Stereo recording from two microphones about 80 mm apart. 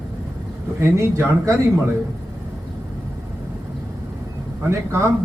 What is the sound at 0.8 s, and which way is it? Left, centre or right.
Speech, right.